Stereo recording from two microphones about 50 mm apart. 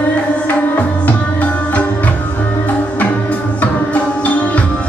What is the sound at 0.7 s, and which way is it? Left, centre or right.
Music, left.